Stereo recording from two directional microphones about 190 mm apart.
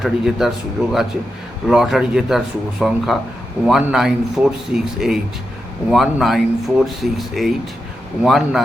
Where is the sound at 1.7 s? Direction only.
Centre (ahead or behind).